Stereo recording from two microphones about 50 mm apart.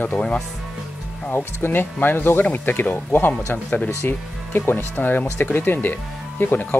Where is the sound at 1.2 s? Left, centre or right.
Left.